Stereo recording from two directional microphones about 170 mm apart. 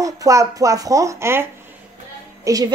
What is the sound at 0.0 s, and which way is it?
Speech, 20° right (ahead or behind).